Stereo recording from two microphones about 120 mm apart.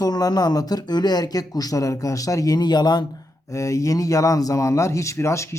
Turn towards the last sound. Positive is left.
turn(degrees=25)  # may be behind; listen again after turning